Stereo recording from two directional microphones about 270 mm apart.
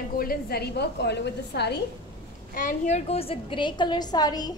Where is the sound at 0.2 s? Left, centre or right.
Left.